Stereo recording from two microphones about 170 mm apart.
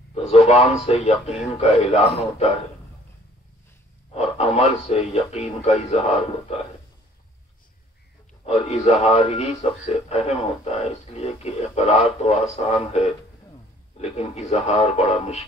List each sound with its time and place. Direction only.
0.1 s speech: 40° left (ahead or behind)
4.1 s speech: 40° left (ahead or behind)
8.5 s speech: 40° left (ahead or behind)